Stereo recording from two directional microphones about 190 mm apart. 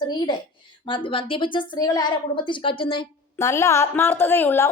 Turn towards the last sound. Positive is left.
turn(degrees=10)  # may be behind; listen again after turning